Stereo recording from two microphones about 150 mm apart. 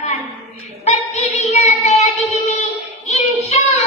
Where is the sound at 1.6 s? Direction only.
50° left (ahead or behind).